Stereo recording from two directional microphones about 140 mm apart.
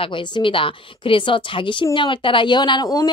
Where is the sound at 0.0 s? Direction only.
35° left (ahead or behind).